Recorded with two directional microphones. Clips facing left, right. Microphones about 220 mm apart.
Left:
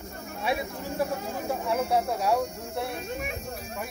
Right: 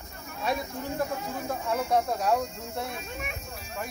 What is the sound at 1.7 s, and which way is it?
Speech, 10° left (ahead or behind).